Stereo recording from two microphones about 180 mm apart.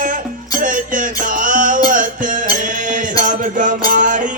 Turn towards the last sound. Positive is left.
turn(degrees=-45)  # may be behind; listen again after turning